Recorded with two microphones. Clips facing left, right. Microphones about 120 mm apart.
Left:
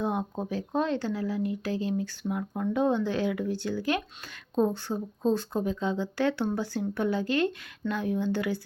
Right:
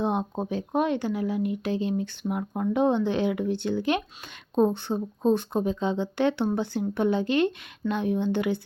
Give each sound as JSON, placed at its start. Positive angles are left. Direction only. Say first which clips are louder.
{"t": 0.0, "sound": "speech", "louder": "right 3 dB", "side_deg": -20}